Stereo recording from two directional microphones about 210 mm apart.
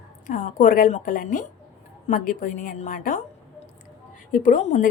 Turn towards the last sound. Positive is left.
turn(degrees=40)  # may be behind; listen again after turning